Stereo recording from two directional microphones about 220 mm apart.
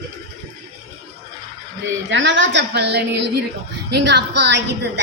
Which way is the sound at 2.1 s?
55° right (ahead or behind).